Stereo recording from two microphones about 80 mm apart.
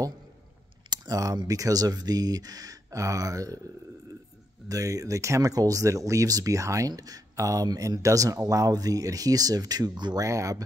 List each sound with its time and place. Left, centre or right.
0.8 s a sound: right
1.5 s speech: right
4.6 s speech: right
10.2 s speech: right